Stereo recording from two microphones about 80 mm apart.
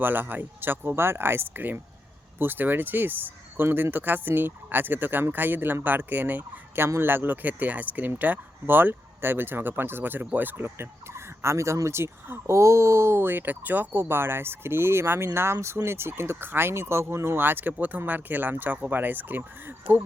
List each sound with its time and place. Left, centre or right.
0.0 s speech: right